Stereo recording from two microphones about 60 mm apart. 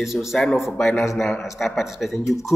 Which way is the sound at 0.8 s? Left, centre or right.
Centre.